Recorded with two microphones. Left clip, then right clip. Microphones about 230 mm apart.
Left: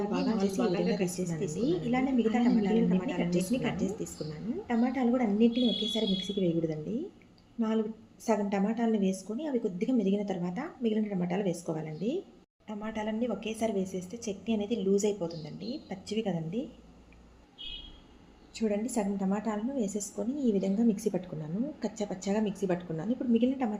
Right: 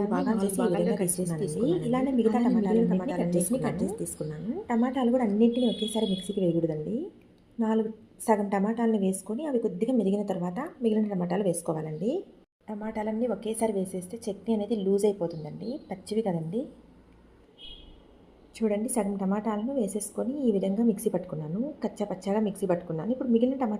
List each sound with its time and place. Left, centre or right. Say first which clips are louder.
0.0 s a woman's voice: right 3 dB; centre
18.5 s a woman's voice: right 3 dB; centre